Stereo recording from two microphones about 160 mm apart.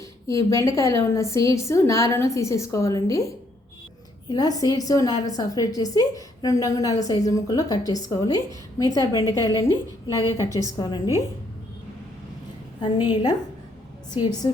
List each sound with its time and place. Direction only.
0.3 s a woman's voice: 20° left (ahead or behind)
12.8 s a woman's voice: 30° left (ahead or behind)